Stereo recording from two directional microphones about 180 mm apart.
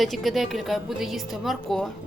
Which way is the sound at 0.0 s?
Centre (ahead or behind).